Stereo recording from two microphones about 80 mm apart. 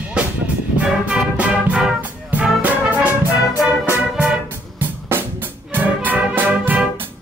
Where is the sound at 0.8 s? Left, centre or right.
Centre.